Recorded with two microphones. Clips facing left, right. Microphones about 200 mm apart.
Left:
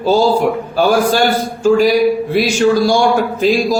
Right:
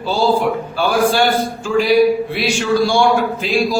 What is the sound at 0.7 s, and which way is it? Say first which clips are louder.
Speech: left 4 dB; 40° left (ahead or behind).